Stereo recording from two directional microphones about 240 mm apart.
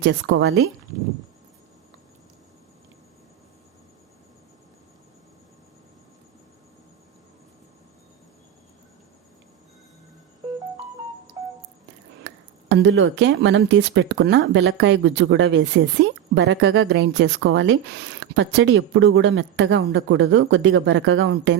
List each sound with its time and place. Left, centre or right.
0.0 s speech: right
12.2 s speech: right